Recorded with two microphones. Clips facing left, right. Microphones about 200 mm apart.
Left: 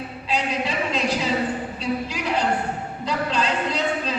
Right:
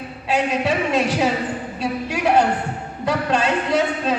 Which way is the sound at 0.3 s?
65° right (ahead or behind).